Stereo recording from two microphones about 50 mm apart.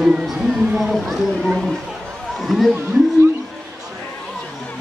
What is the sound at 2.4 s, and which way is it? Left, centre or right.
Speech, centre.